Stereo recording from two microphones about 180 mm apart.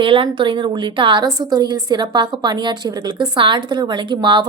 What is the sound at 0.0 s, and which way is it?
A woman's voice, 30° right (ahead or behind).